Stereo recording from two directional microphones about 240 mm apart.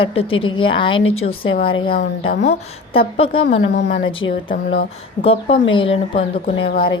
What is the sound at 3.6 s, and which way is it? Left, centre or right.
Speech, left.